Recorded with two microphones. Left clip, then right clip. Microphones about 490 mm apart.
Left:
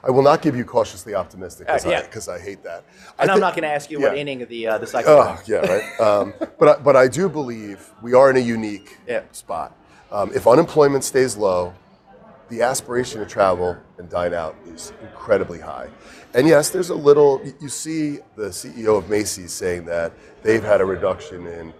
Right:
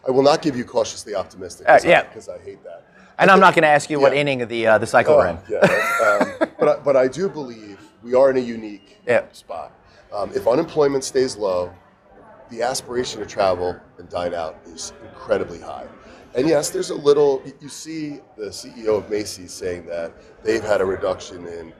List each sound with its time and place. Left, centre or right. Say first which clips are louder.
0.0 s a man's voice: left 1 dB; left
2.1 s speech: left 4 dB; left
3.4 s speech: right 8 dB; right
5.0 s speech: left 3 dB; left
5.5 s speech: right 4 dB; right
6.6 s speech: left 5 dB; left
9.1 s speech: right 7 dB; right
9.5 s a man's voice: left 9 dB; left